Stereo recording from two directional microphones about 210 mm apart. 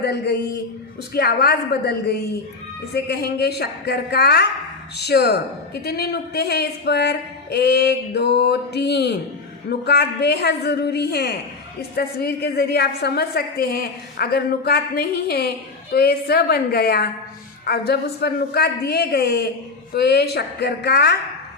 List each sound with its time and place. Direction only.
0.0 s a woman's voice: 50° left (ahead or behind)